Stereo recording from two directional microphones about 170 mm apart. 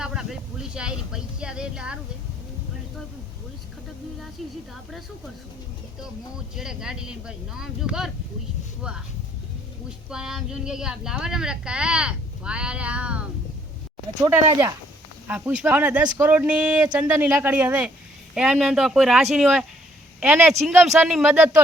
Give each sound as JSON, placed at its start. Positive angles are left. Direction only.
{"t": 0.0, "sound": "a sound", "side_deg": -5}
{"t": 6.0, "sound": "speech", "side_deg": -5}
{"t": 10.1, "sound": "speech", "side_deg": -5}
{"t": 14.1, "sound": "speech", "side_deg": -20}
{"t": 15.3, "sound": "speech", "side_deg": -10}